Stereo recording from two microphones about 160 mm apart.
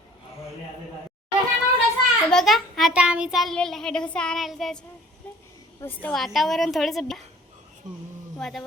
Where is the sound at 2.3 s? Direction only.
Centre (ahead or behind).